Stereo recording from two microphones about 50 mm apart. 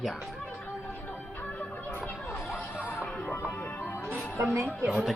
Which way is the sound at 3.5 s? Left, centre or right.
Left.